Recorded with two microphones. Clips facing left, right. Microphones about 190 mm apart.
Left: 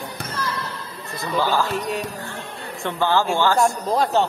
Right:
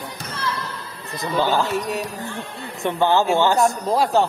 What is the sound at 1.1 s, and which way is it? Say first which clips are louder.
Speech: right 1 dB; 15° right (ahead or behind).